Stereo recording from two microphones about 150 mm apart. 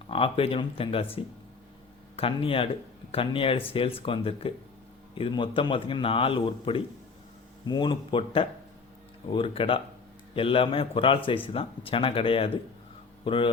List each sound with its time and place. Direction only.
0.1 s a man's voice: 40° left (ahead or behind)
2.1 s a man's voice: 40° left (ahead or behind)